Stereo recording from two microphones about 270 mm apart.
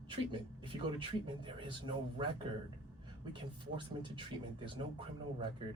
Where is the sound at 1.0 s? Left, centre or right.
Centre.